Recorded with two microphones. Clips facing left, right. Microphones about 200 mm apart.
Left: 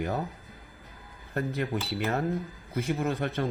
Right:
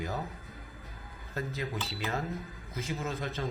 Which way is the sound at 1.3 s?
60° left (ahead or behind).